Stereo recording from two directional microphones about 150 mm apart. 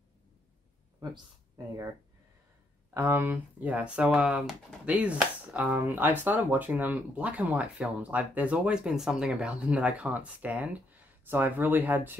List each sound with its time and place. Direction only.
1.6 s speech: 25° right (ahead or behind)
2.9 s speech: 20° right (ahead or behind)